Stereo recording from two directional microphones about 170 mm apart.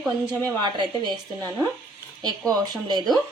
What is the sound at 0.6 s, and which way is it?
Speech, 25° right (ahead or behind).